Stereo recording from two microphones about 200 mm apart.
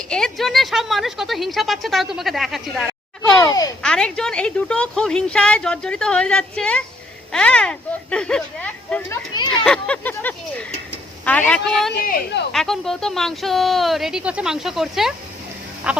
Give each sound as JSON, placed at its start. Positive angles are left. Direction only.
{"t": 0.1, "sound": "speech", "side_deg": 0}
{"t": 3.4, "sound": "a child's voice", "side_deg": 20}
{"t": 3.8, "sound": "speech", "side_deg": 5}
{"t": 12.0, "sound": "speech", "side_deg": 50}
{"t": 12.5, "sound": "speech", "side_deg": 0}
{"t": 15.9, "sound": "frog", "side_deg": -5}